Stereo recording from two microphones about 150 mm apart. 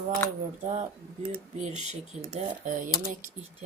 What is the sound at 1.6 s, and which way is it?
Speech, 50° right (ahead or behind).